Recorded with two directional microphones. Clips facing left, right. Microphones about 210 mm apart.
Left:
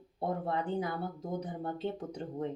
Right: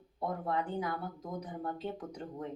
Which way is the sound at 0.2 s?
30° left (ahead or behind).